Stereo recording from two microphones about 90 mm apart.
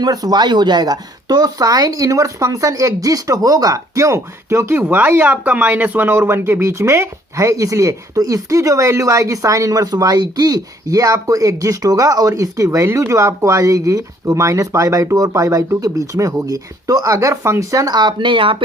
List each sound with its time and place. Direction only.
0.0 s speech: 45° right (ahead or behind); by 4.8 s 30° right (ahead or behind)
4.8 s speech: 20° right (ahead or behind); by 18.5 s 70° right (ahead or behind)